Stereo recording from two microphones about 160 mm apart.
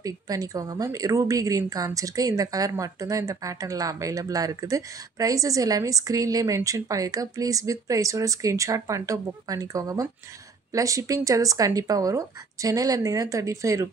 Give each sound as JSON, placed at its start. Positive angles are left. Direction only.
{"t": 0.0, "sound": "a woman's voice", "side_deg": -20}